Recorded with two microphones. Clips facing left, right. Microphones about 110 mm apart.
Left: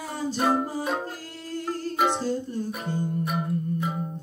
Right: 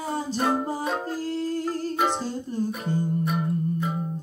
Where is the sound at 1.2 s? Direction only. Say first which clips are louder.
Right 8 dB; 30° right (ahead or behind).